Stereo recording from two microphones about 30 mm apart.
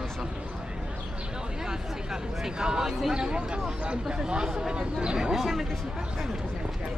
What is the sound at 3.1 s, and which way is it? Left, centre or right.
Speech, right.